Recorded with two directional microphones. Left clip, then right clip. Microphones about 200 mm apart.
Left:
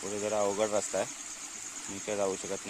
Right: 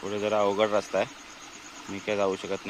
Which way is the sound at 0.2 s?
10° left (ahead or behind).